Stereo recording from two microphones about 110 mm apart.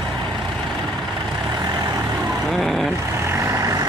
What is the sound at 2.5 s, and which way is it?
Vehicle, centre (ahead or behind).